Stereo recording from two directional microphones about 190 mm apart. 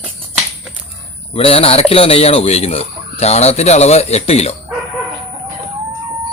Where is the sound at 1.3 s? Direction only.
30° left (ahead or behind).